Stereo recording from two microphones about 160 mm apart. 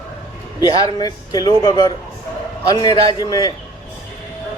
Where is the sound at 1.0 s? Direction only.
25° left (ahead or behind).